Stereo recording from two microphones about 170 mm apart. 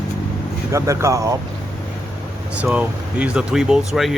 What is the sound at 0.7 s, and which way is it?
Speech, 15° right (ahead or behind).